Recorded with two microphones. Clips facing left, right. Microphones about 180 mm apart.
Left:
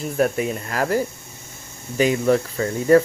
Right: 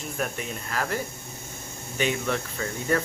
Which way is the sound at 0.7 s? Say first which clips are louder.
Left 4 dB; 40° left (ahead or behind).